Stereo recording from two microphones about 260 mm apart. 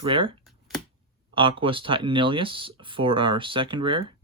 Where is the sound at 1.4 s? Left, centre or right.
Centre.